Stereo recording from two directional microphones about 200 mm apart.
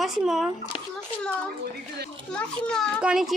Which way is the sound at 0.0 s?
Centre (ahead or behind).